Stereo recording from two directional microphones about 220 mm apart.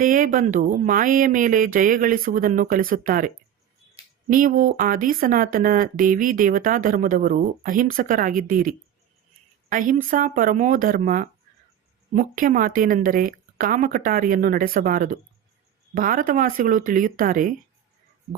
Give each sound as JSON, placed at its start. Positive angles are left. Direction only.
{"t": 0.0, "sound": "speech", "side_deg": -40}